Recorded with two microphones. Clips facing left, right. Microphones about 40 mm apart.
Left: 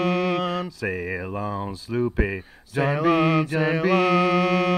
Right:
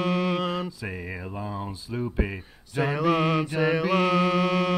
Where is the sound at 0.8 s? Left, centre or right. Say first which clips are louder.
Left 7 dB; left.